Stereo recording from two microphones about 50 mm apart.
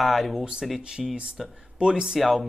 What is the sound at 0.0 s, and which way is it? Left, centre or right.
Speech, centre.